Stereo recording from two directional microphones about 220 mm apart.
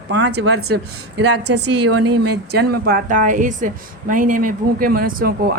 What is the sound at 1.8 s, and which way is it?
Speech, 90° right.